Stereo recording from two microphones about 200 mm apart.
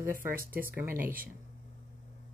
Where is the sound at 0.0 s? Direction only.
10° right (ahead or behind).